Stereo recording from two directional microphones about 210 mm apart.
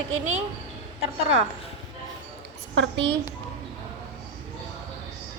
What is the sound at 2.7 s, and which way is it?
Speech, 60° right (ahead or behind).